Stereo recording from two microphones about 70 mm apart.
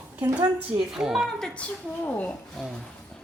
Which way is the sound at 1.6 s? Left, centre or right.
Left.